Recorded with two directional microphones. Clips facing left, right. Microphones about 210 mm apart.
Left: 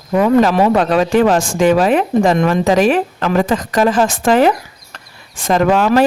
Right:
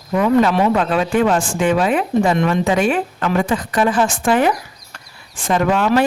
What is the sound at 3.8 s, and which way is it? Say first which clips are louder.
Speech: left 3 dB; 40° left (ahead or behind).